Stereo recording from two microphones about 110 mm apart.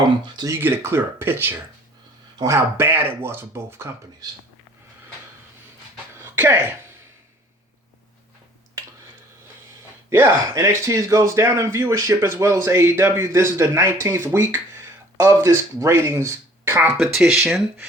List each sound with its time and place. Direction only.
0.4 s speech: 20° right (ahead or behind)
6.2 s speech: 20° right (ahead or behind)
10.1 s speech: 25° right (ahead or behind)
17.0 s speech: centre (ahead or behind)